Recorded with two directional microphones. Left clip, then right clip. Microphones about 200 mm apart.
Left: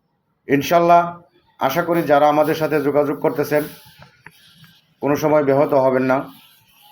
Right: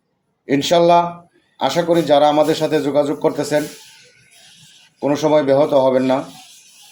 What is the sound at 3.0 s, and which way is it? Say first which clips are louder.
Speech: right 1 dB; 20° right (ahead or behind).